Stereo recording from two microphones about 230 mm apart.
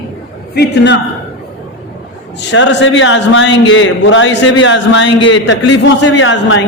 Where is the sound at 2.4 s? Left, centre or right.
Left.